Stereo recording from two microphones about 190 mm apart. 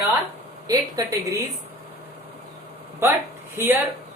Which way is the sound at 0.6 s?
20° right (ahead or behind).